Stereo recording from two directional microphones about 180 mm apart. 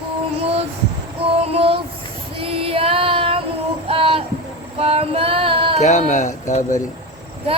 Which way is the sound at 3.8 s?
30° right (ahead or behind).